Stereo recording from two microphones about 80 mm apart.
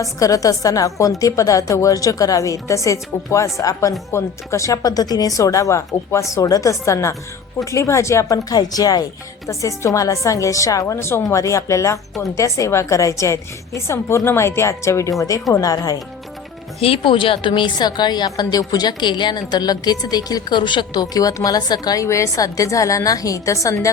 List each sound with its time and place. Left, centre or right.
0.0 s a woman's voice: left
9.5 s a woman's voice: left
15.5 s speech: left
17.0 s speech: left
18.3 s a woman's voice: left
22.0 s speech: left